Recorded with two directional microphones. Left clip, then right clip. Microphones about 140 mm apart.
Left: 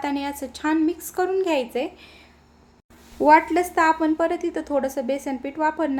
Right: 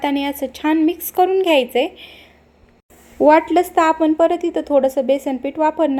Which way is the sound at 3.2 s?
25° right (ahead or behind).